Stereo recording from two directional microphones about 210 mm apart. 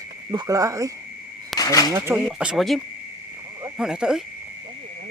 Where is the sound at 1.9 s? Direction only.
10° right (ahead or behind).